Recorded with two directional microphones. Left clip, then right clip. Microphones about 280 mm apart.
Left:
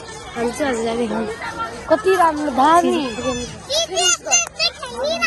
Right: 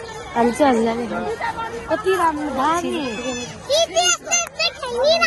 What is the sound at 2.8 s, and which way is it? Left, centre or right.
Speech, centre.